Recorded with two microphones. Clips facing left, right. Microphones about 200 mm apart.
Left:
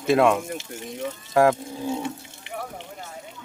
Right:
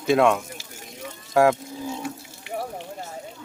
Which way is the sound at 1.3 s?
Centre (ahead or behind).